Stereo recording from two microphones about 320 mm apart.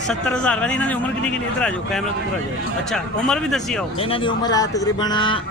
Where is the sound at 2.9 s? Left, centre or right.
Centre.